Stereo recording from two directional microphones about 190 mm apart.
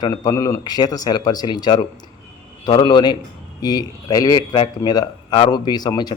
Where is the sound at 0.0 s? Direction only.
20° left (ahead or behind).